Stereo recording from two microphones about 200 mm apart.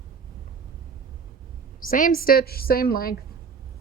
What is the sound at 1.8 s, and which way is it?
A woman's voice, 45° left (ahead or behind).